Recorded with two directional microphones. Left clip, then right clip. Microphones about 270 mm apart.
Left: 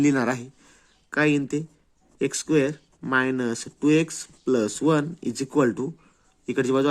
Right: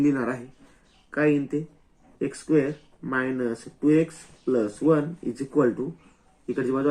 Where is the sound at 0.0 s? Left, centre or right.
Left.